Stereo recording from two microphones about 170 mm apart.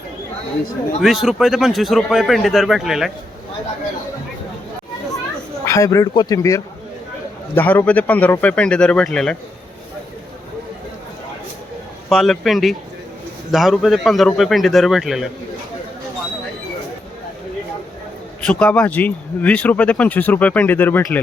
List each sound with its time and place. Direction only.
1.0 s speech: centre (ahead or behind)
5.6 s a man's voice: 20° left (ahead or behind)
12.0 s speech: centre (ahead or behind)
18.4 s speech: 10° left (ahead or behind)